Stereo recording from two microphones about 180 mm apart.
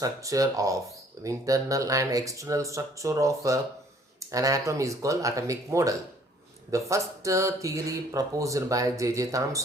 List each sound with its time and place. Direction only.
0.0 s speech: 20° right (ahead or behind)